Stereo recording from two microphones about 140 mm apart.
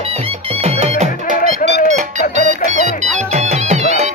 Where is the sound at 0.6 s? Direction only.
50° right (ahead or behind).